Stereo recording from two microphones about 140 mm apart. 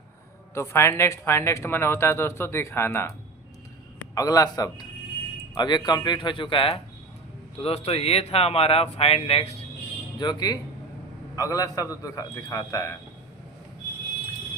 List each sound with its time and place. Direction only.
0.5 s speech: 20° left (ahead or behind)
4.1 s a man's voice: 25° left (ahead or behind); by 9.6 s 45° left (ahead or behind)
10.2 s a man's voice: 30° left (ahead or behind)